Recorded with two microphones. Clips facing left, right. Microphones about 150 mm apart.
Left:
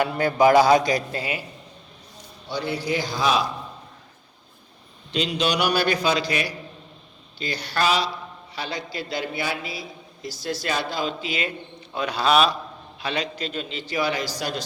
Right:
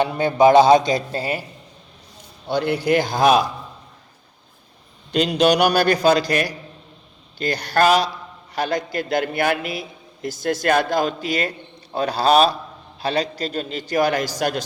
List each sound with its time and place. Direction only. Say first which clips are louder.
0.0 s a man's voice: right 3 dB; 25° right (ahead or behind)
2.5 s speech: right 7 dB; 55° right (ahead or behind)
5.1 s a man's voice: right 7 dB; 50° right (ahead or behind)